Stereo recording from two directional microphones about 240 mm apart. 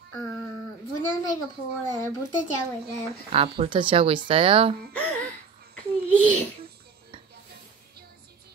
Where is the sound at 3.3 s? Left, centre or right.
Right.